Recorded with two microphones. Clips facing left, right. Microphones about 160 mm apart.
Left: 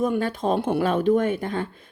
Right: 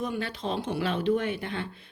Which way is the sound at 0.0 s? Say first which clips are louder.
Left 8 dB; 45° left (ahead or behind).